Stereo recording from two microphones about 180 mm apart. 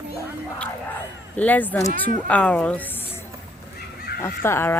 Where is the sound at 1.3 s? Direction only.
10° left (ahead or behind).